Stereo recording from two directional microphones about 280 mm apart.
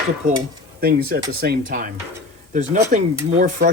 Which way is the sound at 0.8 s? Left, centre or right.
Right.